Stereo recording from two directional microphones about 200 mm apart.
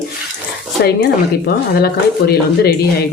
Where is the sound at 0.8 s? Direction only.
55° left (ahead or behind).